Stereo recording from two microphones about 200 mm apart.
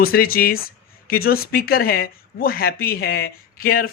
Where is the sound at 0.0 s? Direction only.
45° left (ahead or behind).